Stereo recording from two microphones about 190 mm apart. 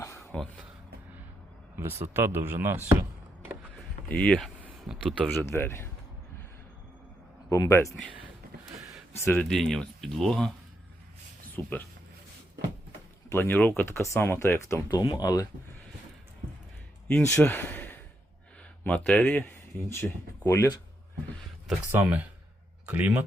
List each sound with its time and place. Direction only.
0.2 s a sound: 5° left (ahead or behind)
1.7 s speech: 10° right (ahead or behind)
4.1 s speech: 5° left (ahead or behind)
5.3 s speech: 10° left (ahead or behind)
7.5 s speech: 15° left (ahead or behind)
9.2 s speech: 10° left (ahead or behind)
11.6 s speech: 10° left (ahead or behind)
13.3 s speech: 10° left (ahead or behind)
17.1 s speech: 10° left (ahead or behind)
21.9 s speech: 5° right (ahead or behind)